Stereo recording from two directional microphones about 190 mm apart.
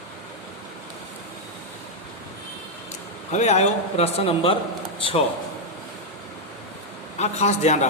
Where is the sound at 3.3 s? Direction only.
35° left (ahead or behind).